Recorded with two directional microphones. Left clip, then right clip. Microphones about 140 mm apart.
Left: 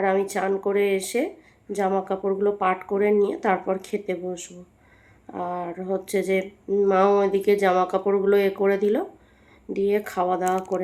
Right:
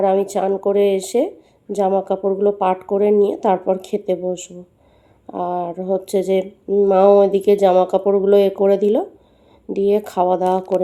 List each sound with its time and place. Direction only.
0.0 s speech: 30° right (ahead or behind)